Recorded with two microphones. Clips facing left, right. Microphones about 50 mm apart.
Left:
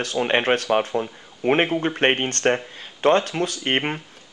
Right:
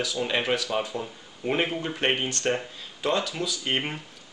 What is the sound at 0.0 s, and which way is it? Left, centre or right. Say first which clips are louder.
Speech: left 6 dB; left.